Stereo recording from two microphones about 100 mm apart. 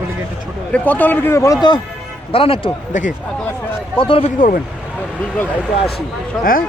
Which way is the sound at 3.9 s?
60° left (ahead or behind).